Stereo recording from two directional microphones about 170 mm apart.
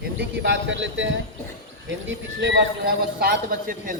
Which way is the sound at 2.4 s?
90° right.